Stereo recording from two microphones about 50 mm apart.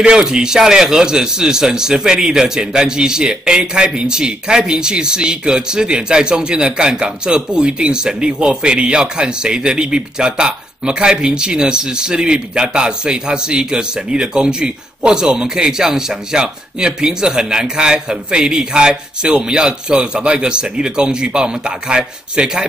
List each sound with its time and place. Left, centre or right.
0.0 s a man's voice: centre